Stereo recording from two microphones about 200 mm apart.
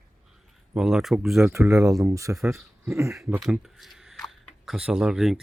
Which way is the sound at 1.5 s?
15° right (ahead or behind).